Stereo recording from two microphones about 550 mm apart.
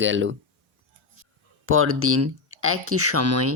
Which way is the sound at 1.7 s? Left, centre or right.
Right.